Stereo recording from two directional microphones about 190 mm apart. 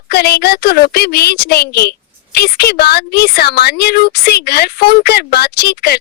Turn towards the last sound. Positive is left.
turn(degrees=55)  # may be behind; listen again after turning